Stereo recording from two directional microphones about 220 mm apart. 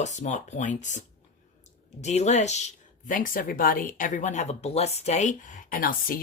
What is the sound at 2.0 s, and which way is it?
Speech, 30° left (ahead or behind).